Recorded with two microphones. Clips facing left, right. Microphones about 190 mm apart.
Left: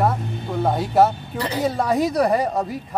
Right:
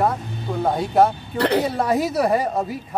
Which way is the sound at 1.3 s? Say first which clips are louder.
Right 6 dB; 65° right (ahead or behind).